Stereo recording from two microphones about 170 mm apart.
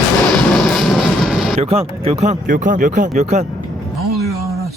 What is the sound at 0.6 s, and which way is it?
Vehicle, centre (ahead or behind).